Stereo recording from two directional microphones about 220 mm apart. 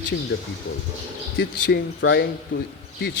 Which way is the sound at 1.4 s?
50° left (ahead or behind).